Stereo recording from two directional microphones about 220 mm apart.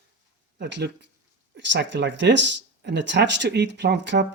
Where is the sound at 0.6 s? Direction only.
50° right (ahead or behind).